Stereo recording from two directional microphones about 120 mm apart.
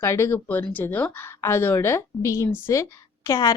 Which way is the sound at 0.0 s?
20° left (ahead or behind).